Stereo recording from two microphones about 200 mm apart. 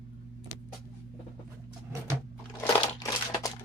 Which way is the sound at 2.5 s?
15° left (ahead or behind).